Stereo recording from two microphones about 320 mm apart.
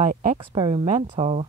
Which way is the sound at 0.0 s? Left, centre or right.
Right.